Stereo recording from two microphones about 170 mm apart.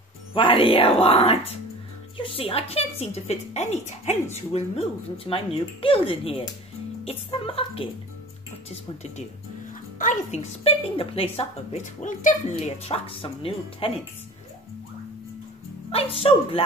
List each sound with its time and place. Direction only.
0.3 s a woman's voice: 30° left (ahead or behind); by 12.5 s 50° left (ahead or behind)
12.5 s a woman's voice: 35° left (ahead or behind)
15.9 s a woman's voice: 35° left (ahead or behind)